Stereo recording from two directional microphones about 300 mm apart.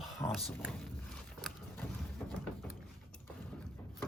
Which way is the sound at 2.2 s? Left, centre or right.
Centre.